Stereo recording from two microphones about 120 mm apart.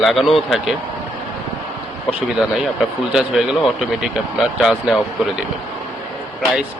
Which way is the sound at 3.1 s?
5° right (ahead or behind).